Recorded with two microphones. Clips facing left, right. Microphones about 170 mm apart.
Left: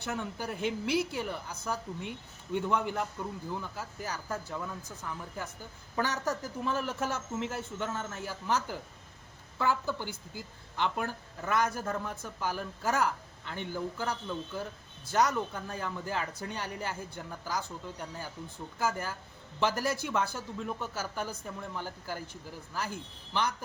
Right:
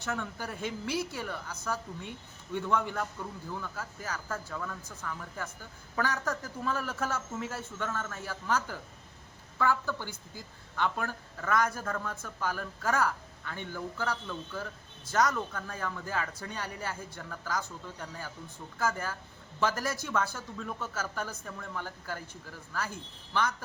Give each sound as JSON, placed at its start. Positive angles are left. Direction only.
{"t": 0.1, "sound": "speech", "side_deg": 15}